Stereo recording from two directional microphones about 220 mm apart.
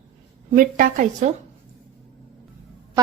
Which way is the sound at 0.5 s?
40° right (ahead or behind).